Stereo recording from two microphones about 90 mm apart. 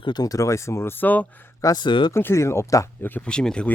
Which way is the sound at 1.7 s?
60° left (ahead or behind).